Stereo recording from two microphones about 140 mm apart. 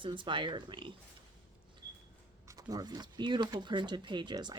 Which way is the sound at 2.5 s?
25° right (ahead or behind).